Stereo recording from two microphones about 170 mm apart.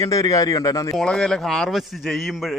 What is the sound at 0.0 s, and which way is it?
Speech, 20° left (ahead or behind).